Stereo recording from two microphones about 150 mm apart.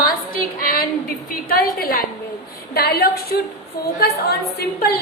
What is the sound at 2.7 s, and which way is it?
A woman's voice, 90° left.